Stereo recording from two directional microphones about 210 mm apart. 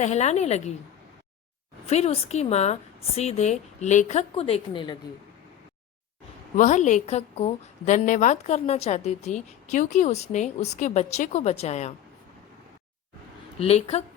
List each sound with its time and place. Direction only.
0.0 s a woman's voice: 35° left (ahead or behind)
1.9 s a woman's voice: 30° left (ahead or behind)
6.6 s a woman's voice: 35° left (ahead or behind)
13.6 s speech: 30° left (ahead or behind)